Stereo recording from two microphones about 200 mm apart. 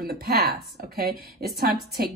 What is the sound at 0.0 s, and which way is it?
A woman's voice, 50° right (ahead or behind).